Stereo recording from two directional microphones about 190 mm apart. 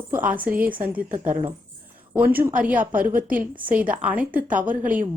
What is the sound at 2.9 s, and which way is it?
Speech, 45° right (ahead or behind).